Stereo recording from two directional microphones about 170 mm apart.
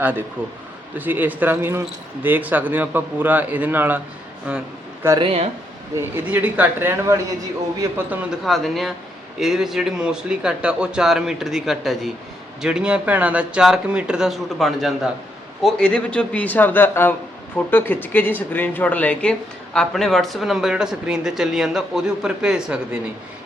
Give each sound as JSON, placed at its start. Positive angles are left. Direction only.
{"t": 0.0, "sound": "speech", "side_deg": -10}
{"t": 5.0, "sound": "speech", "side_deg": -20}
{"t": 6.0, "sound": "speech", "side_deg": -10}
{"t": 8.4, "sound": "speech", "side_deg": 0}